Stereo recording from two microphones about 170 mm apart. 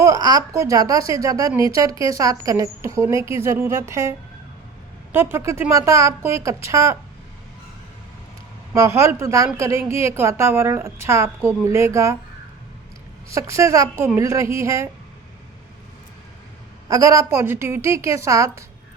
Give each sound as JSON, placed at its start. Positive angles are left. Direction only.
{"t": 0.0, "sound": "a woman's voice", "side_deg": -20}
{"t": 5.1, "sound": "a woman's voice", "side_deg": -15}
{"t": 8.7, "sound": "a woman's voice", "side_deg": -20}
{"t": 13.3, "sound": "a woman's voice", "side_deg": -15}
{"t": 16.9, "sound": "a woman's voice", "side_deg": -20}